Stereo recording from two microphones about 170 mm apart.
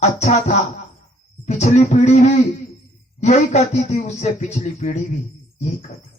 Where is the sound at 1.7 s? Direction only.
40° left (ahead or behind).